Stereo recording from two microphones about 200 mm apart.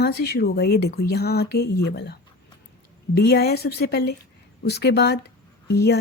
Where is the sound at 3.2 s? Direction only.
50° left (ahead or behind).